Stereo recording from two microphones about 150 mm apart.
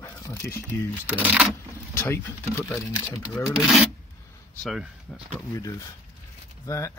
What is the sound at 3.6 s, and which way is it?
Rub, centre (ahead or behind).